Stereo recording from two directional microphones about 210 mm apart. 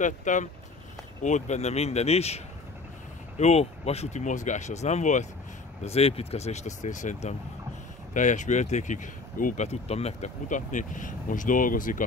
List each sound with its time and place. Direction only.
0.0 s speech: 35° left (ahead or behind)